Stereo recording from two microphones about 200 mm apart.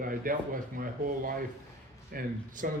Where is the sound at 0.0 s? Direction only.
45° right (ahead or behind).